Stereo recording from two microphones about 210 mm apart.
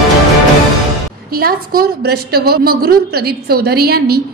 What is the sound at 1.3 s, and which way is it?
A woman's voice, 45° right (ahead or behind).